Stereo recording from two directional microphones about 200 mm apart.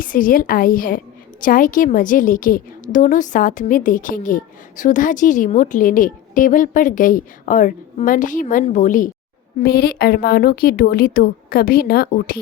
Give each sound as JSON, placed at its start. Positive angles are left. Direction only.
{"t": 0.0, "sound": "a woman's voice", "side_deg": 45}